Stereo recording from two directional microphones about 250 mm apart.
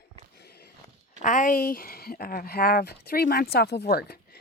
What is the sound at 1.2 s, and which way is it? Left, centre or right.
Speech, left.